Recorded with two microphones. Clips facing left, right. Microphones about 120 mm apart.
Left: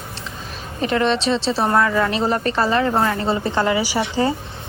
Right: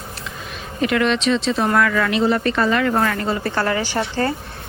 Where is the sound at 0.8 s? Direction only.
35° left (ahead or behind).